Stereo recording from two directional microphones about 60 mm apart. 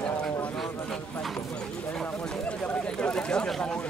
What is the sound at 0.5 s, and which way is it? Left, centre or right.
Speech, centre.